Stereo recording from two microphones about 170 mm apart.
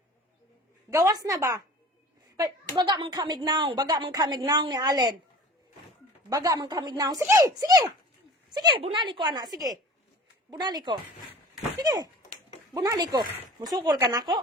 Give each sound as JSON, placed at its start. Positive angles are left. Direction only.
{"t": 0.9, "sound": "a woman's voice", "side_deg": -20}
{"t": 2.7, "sound": "a woman's voice", "side_deg": -25}
{"t": 6.3, "sound": "a woman's voice", "side_deg": -20}